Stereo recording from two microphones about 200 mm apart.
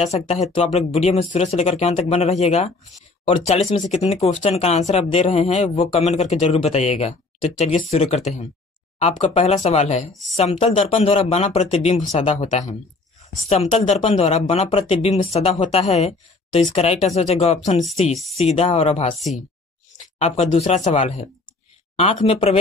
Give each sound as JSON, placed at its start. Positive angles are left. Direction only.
{"t": 0.0, "sound": "speech", "side_deg": 35}
{"t": 18.1, "sound": "speech", "side_deg": 0}
{"t": 18.4, "sound": "speech", "side_deg": 30}
{"t": 19.1, "sound": "speech", "side_deg": 0}
{"t": 20.2, "sound": "speech", "side_deg": 35}